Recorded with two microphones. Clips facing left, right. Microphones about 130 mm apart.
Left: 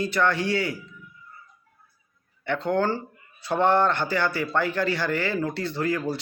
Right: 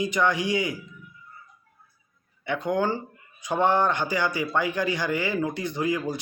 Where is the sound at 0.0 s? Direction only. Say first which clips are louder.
Even; 15° right (ahead or behind).